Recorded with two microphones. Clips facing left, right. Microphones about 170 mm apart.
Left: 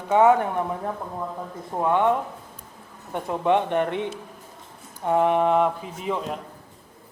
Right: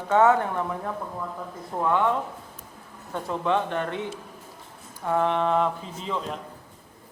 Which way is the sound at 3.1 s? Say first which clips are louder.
Left 3 dB; 20° left (ahead or behind).